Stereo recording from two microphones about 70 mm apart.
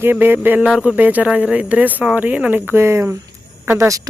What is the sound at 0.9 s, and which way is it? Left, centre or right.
Speech, right.